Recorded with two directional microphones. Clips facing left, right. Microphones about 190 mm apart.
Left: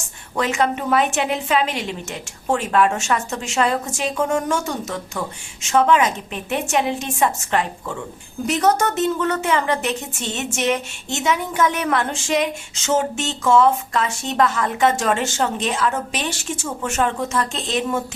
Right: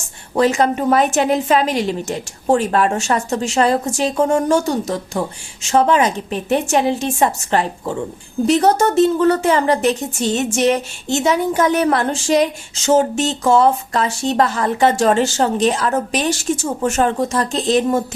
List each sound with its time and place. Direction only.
0.3 s a woman's voice: 35° right (ahead or behind)